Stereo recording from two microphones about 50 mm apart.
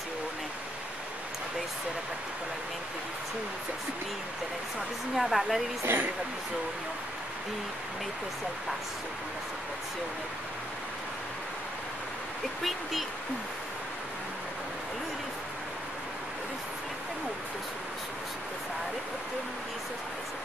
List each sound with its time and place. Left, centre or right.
5.1 s speech: centre
5.9 s speech: right